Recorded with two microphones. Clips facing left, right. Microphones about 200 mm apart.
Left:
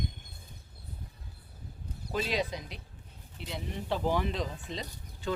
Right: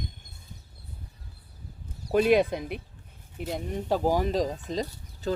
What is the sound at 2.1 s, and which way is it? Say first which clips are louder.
Speech: right 11 dB; 55° right (ahead or behind).